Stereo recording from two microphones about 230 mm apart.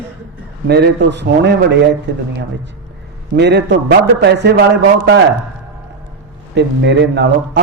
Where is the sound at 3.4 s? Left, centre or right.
Right.